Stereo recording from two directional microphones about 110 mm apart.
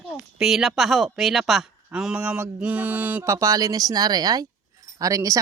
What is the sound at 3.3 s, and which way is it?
Speech, 30° right (ahead or behind).